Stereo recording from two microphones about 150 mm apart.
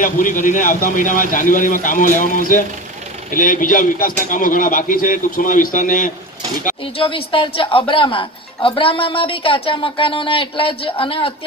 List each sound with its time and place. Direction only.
0.0 s a man's voice: 60° left (ahead or behind)
7.0 s speech: 35° left (ahead or behind)